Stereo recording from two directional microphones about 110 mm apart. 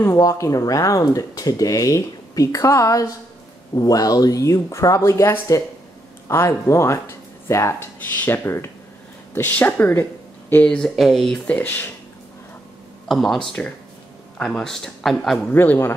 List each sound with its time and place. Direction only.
0.2 s speech: 30° left (ahead or behind); by 10.9 s 10° left (ahead or behind)
11.0 s speech: centre (ahead or behind); by 11.9 s 15° left (ahead or behind)
13.1 s speech: centre (ahead or behind)
15.5 s speech: 20° left (ahead or behind)